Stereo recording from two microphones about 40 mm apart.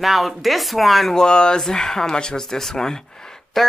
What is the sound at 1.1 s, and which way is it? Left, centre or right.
Speech, centre.